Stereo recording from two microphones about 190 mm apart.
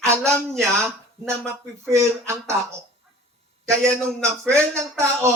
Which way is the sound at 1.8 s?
15° right (ahead or behind).